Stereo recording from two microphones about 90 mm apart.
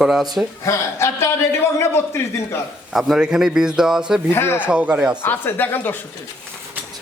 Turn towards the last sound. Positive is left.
turn(degrees=20)  # may be behind; listen again after turning